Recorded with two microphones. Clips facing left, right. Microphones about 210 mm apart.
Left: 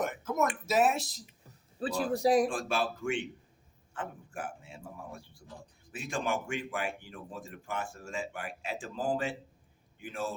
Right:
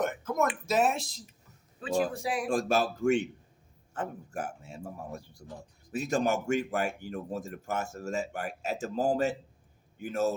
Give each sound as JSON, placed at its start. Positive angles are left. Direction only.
{"t": 0.0, "sound": "speech", "side_deg": 5}
{"t": 1.5, "sound": "a man's voice", "side_deg": 35}
{"t": 2.5, "sound": "a man's voice", "side_deg": -40}